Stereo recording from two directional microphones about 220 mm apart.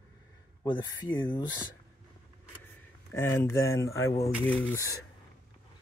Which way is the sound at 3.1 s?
10° left (ahead or behind).